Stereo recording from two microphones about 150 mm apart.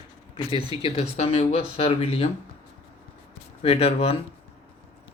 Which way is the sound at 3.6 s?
40° left (ahead or behind).